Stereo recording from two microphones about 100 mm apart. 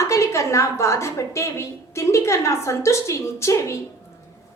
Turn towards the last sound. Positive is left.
turn(degrees=30)  # may be behind; listen again after turning